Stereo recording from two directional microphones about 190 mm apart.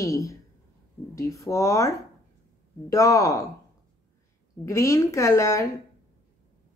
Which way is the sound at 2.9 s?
15° left (ahead or behind).